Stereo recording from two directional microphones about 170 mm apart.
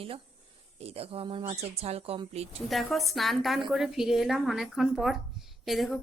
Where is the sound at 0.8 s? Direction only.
35° right (ahead or behind).